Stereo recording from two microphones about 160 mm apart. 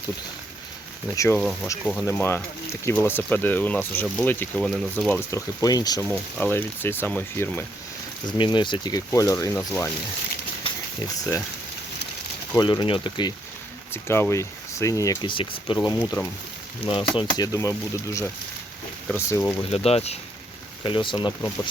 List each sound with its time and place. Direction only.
1.1 s speech: 20° left (ahead or behind)
1.8 s speech: 10° left (ahead or behind); by 6.1 s 25° left (ahead or behind)
6.1 s speech: 10° left (ahead or behind)
8.4 s speech: 30° left (ahead or behind)
11.2 s speech: 20° left (ahead or behind)
12.5 s speech: 25° left (ahead or behind)
13.9 s speech: 15° left (ahead or behind)
19.7 s speech: 40° left (ahead or behind)